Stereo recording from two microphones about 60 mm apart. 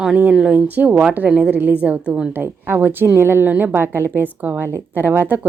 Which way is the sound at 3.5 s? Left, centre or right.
Right.